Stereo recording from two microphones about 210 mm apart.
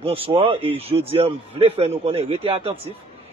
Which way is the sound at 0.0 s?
25° right (ahead or behind).